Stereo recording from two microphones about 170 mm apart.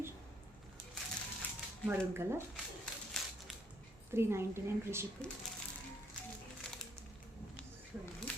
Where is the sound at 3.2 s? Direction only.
5° left (ahead or behind).